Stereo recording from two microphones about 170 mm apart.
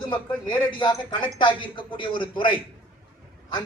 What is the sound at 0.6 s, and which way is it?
A man's voice, 25° left (ahead or behind).